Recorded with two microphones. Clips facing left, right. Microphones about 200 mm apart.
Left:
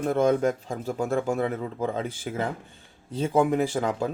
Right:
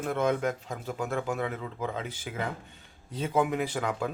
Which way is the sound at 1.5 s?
45° left (ahead or behind).